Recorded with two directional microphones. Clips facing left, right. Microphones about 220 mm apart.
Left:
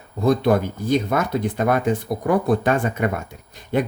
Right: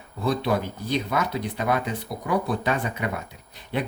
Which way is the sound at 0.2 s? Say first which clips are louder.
Left 7 dB; 45° left (ahead or behind).